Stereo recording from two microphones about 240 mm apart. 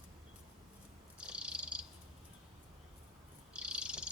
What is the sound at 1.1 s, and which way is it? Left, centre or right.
Cat, centre.